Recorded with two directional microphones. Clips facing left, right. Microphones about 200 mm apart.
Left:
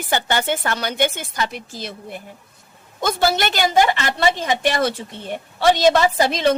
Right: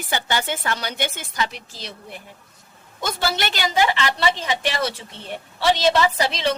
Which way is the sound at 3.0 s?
50° left (ahead or behind).